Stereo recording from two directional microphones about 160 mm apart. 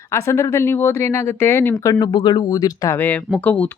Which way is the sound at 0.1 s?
20° left (ahead or behind).